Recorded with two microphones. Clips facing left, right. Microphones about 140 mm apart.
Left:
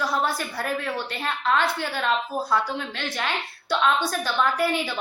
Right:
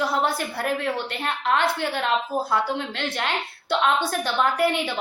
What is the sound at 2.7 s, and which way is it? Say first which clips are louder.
Speech: right 2 dB; 60° right (ahead or behind).